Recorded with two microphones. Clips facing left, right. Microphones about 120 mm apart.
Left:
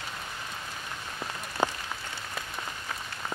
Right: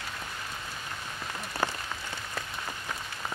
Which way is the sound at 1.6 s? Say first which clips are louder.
Left 3 dB; 20° left (ahead or behind).